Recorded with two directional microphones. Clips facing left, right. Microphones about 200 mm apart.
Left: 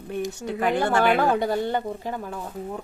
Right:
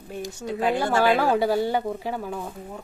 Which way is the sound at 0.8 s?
5° right (ahead or behind).